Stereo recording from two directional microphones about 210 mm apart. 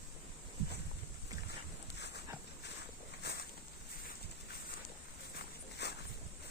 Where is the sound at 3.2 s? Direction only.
50° left (ahead or behind).